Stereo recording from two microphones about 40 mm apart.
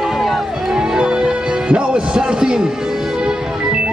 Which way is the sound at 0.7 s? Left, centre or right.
Centre.